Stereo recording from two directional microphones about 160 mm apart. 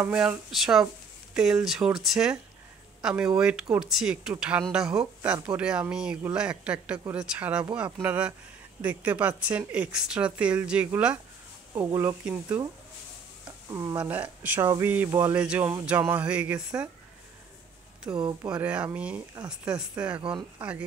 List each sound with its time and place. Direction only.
0.0 s speech: 5° right (ahead or behind)
13.7 s speech: 15° right (ahead or behind)
18.1 s speech: 20° right (ahead or behind)